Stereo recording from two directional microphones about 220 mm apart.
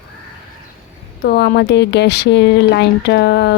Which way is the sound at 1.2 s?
45° left (ahead or behind).